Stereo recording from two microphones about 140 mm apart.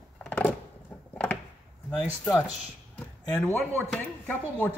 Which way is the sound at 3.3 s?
10° left (ahead or behind).